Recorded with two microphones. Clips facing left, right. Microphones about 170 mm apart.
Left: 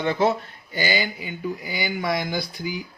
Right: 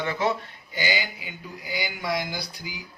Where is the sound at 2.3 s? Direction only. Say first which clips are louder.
Left 7 dB; 55° left (ahead or behind).